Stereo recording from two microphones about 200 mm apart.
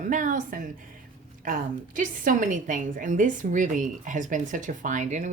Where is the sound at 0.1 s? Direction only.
40° right (ahead or behind).